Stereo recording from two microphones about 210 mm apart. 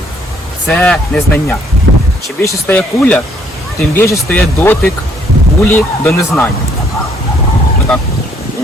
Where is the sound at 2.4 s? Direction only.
10° left (ahead or behind).